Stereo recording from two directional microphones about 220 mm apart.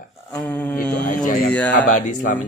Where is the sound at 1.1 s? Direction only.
40° left (ahead or behind).